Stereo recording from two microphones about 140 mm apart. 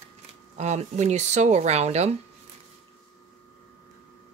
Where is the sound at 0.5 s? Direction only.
55° right (ahead or behind).